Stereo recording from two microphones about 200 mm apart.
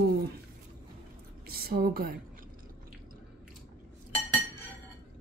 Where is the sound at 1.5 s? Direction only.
50° right (ahead or behind).